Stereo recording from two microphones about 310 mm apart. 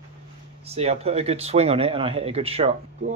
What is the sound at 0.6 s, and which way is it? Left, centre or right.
Speech, centre.